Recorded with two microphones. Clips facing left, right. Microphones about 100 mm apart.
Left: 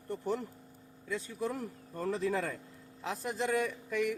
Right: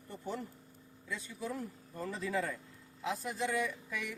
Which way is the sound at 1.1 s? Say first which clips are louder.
Left 4 dB; 50° left (ahead or behind).